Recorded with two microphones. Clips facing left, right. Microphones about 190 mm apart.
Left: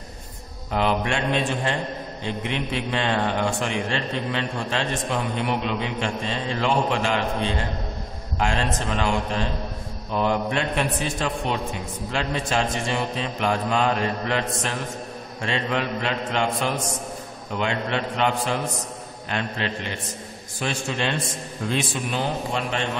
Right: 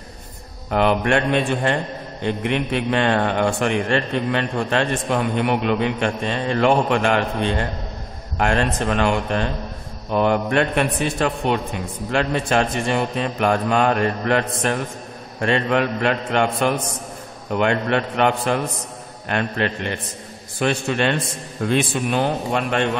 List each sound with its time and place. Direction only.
0.7 s a man's voice: 60° right (ahead or behind)